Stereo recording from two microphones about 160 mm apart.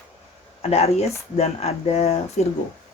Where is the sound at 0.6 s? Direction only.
40° left (ahead or behind).